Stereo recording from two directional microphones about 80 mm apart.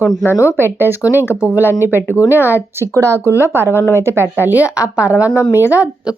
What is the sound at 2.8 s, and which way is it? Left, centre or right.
A woman's voice, right.